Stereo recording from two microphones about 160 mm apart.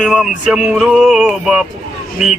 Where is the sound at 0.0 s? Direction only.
5° right (ahead or behind).